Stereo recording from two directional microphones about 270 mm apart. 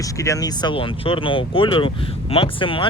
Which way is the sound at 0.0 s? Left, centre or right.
Centre.